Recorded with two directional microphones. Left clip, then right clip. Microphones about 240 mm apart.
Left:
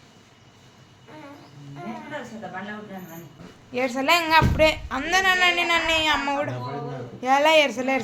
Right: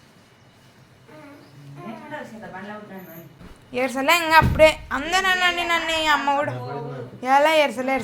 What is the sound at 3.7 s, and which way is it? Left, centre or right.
A man's voice, centre.